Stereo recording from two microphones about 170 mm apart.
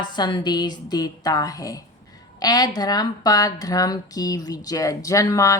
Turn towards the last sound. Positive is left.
turn(degrees=20)  # may be behind; listen again after turning